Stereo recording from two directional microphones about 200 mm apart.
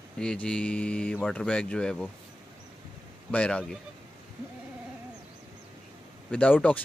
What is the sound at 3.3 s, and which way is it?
Speech, 5° left (ahead or behind).